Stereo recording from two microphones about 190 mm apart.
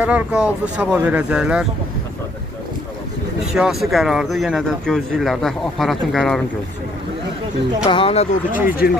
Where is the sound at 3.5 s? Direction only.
Centre (ahead or behind).